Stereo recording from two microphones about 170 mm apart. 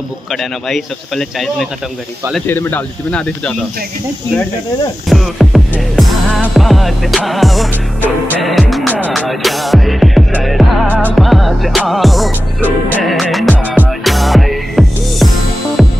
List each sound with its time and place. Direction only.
0.3 s music: centre (ahead or behind)
2.4 s speech: 10° left (ahead or behind)
5.1 s music: centre (ahead or behind)